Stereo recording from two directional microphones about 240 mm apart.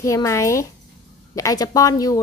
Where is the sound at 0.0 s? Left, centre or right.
Centre.